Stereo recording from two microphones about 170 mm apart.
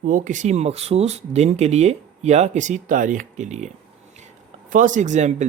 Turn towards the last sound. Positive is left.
turn(degrees=-45)  # may be behind; listen again after turning